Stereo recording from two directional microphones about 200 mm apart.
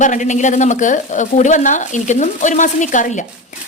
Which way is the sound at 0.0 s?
40° left (ahead or behind).